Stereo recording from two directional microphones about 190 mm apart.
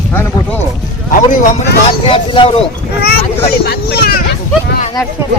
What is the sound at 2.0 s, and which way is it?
Speech, 25° left (ahead or behind).